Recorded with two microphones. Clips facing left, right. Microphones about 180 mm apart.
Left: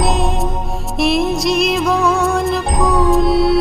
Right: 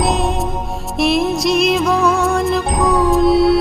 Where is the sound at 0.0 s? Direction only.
Centre (ahead or behind).